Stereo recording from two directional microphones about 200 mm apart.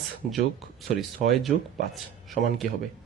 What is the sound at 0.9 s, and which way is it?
Speech, centre (ahead or behind).